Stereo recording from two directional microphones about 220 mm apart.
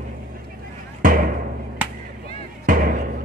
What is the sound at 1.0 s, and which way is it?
Music, 40° right (ahead or behind).